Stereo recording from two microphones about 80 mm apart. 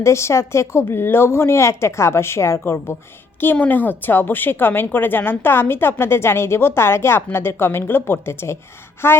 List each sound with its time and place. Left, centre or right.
0.0 s speech: left
3.4 s a woman's voice: left